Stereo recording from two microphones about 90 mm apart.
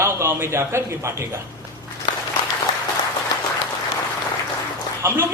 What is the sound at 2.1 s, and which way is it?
Applause, 60° left (ahead or behind).